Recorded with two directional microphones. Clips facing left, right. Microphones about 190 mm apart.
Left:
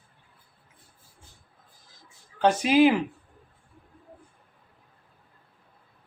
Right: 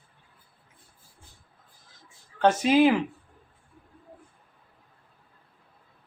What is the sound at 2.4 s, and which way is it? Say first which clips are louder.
Speech: even; centre (ahead or behind).